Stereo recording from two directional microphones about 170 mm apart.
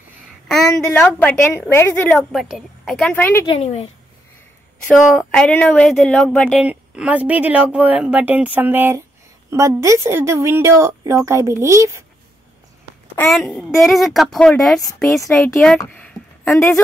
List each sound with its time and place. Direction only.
0.5 s a woman's voice: 5° left (ahead or behind)
2.3 s speech: centre (ahead or behind)
3.4 s a woman's voice: 35° left (ahead or behind)
5.1 s a woman's voice: 5° left (ahead or behind)
6.6 s a woman's voice: 10° right (ahead or behind)
13.1 s speech: 5° left (ahead or behind)
15.9 s a sound: 5° left (ahead or behind)